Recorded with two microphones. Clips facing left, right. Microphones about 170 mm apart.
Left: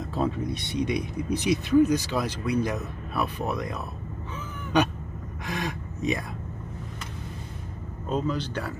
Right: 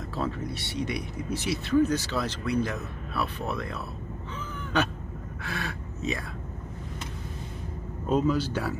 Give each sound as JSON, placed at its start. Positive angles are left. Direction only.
{"t": 0.1, "sound": "speech", "side_deg": 20}
{"t": 5.4, "sound": "speech", "side_deg": 15}
{"t": 8.1, "sound": "a man's voice", "side_deg": -5}